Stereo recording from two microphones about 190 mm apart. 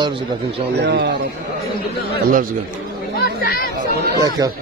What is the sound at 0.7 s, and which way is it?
Speech, 65° right (ahead or behind).